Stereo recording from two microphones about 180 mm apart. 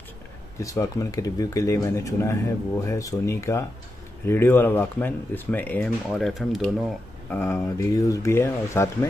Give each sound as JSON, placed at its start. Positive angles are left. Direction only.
{"t": 0.6, "sound": "speech", "side_deg": 20}